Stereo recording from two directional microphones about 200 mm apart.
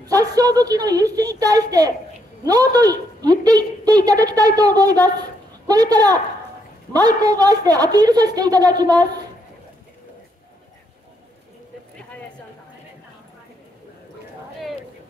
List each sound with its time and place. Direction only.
0.0 s a woman's voice: 20° right (ahead or behind)